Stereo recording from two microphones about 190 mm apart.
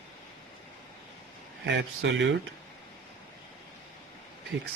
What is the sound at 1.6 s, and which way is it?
Speech, 70° right (ahead or behind).